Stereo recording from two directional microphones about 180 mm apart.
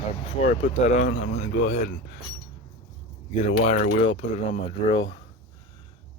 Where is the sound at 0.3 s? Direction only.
35° left (ahead or behind).